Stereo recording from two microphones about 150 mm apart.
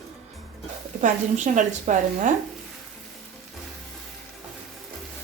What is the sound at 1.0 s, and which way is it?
A woman's voice, 55° right (ahead or behind).